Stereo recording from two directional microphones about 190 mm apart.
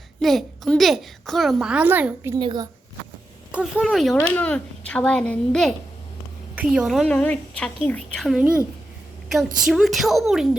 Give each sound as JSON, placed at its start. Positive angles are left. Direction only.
{"t": 0.2, "sound": "a child's voice", "side_deg": 0}
{"t": 2.4, "sound": "speech", "side_deg": -25}
{"t": 3.5, "sound": "a child's voice", "side_deg": -5}